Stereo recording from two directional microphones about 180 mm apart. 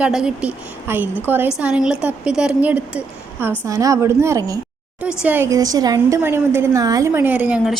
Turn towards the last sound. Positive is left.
turn(degrees=-5)  # may be behind; listen again after turning